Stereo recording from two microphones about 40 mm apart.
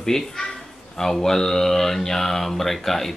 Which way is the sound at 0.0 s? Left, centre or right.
Centre.